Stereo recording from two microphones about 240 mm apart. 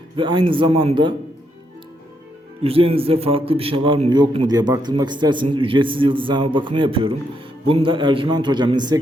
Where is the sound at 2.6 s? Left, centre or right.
Right.